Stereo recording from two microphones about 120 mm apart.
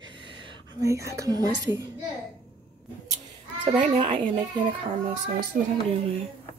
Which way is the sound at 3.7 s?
60° right (ahead or behind).